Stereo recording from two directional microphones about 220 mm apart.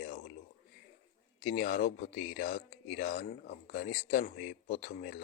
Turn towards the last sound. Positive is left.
turn(degrees=40)  # may be behind; listen again after turning